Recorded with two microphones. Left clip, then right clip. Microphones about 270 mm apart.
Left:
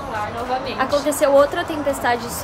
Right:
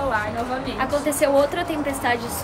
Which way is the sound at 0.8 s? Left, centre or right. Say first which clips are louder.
Left 2 dB; centre.